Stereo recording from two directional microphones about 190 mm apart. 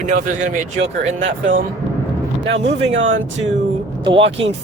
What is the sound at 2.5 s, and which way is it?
Speech, 70° right (ahead or behind).